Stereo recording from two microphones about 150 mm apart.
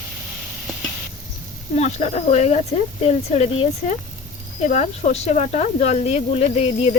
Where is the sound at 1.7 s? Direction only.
45° left (ahead or behind).